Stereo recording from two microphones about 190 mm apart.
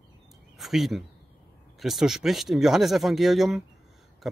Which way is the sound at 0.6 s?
Centre (ahead or behind).